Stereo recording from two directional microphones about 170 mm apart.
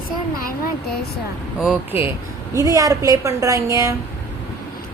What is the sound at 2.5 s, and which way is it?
A woman's voice, 20° right (ahead or behind).